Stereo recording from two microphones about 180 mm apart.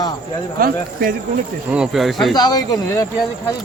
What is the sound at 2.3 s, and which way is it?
Speech, 20° left (ahead or behind).